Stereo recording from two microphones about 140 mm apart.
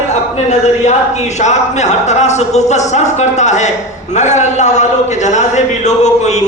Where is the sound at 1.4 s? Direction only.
55° left (ahead or behind).